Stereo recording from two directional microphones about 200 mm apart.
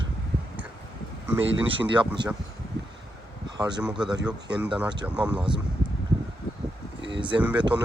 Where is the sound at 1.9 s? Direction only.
20° right (ahead or behind).